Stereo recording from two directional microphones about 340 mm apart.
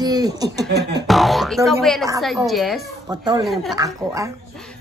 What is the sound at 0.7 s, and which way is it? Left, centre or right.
Beatboxing, right.